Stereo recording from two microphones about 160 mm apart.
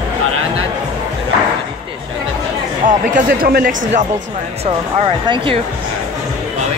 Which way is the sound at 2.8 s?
60° right (ahead or behind).